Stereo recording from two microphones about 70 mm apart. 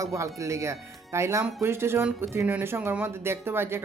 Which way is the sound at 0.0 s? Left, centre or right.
Right.